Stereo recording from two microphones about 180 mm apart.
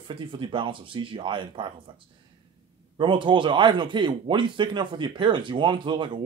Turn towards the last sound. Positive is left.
turn(degrees=-25)  # may be behind; listen again after turning